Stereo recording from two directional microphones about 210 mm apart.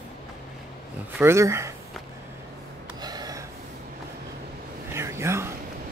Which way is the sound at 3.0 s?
20° right (ahead or behind).